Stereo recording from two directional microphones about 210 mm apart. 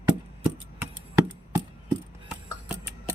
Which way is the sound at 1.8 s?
10° right (ahead or behind).